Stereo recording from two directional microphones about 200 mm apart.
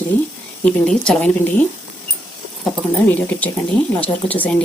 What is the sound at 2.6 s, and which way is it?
Speech, 5° left (ahead or behind).